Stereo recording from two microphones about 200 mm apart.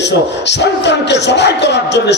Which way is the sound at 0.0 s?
60° left (ahead or behind).